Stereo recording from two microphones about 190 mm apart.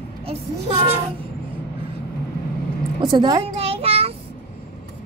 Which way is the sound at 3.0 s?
25° right (ahead or behind).